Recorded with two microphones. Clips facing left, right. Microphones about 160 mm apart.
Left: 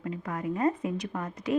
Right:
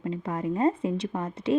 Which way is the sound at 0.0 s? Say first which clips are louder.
Right 3 dB; 25° right (ahead or behind).